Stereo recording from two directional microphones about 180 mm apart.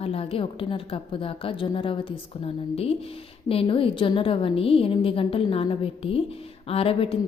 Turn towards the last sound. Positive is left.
turn(degrees=30)  # may be behind; listen again after turning